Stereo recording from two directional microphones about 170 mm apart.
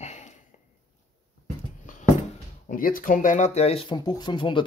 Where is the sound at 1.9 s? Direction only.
50° left (ahead or behind).